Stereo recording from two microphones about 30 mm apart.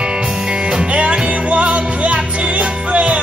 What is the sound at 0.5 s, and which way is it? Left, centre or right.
Music, right.